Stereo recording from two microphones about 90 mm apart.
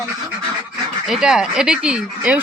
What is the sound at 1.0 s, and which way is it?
Speech, 5° right (ahead or behind).